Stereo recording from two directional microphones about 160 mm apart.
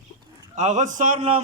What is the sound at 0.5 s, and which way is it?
Speech, 50° right (ahead or behind).